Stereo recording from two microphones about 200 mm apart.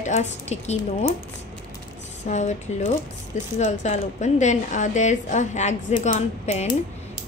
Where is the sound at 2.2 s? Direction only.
35° left (ahead or behind).